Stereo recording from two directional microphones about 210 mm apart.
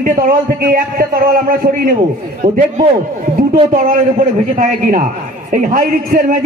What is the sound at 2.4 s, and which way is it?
A man's voice, 35° right (ahead or behind).